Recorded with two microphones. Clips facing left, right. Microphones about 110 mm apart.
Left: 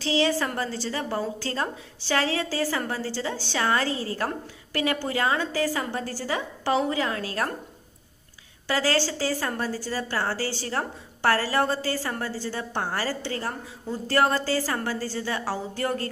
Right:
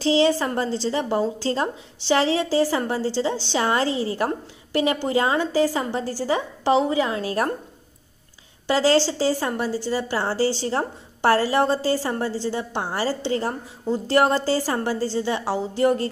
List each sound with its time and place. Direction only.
0.0 s speech: 30° right (ahead or behind)
8.6 s speech: 25° right (ahead or behind)